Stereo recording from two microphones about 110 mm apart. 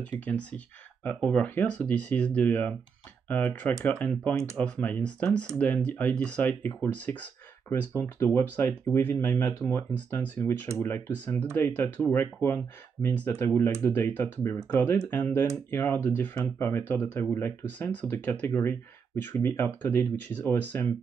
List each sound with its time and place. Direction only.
0.2 s speech: 15° left (ahead or behind)